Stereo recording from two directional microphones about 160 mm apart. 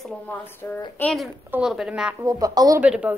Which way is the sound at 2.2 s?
20° right (ahead or behind).